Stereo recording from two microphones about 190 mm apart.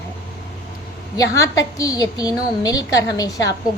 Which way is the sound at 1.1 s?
15° left (ahead or behind).